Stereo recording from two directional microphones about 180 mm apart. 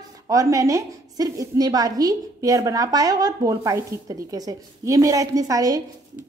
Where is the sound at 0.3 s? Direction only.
15° right (ahead or behind).